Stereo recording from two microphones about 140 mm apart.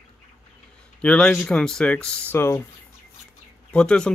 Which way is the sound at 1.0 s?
5° left (ahead or behind).